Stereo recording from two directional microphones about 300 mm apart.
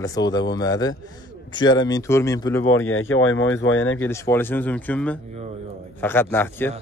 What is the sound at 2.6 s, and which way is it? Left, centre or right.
Speech, left.